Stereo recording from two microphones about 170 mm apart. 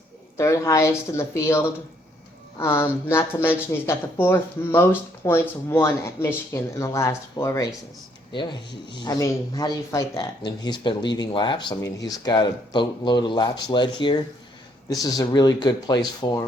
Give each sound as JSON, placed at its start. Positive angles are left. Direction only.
{"t": 0.3, "sound": "speech", "side_deg": 15}